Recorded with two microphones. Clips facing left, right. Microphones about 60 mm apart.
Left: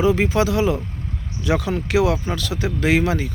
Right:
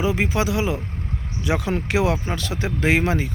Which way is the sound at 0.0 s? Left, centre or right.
Centre.